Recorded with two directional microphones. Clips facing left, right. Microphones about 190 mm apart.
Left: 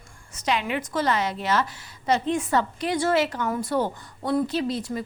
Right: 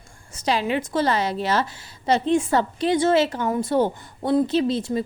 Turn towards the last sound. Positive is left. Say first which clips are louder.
# right 5 dB
turn(degrees=-25)  # may be behind; listen again after turning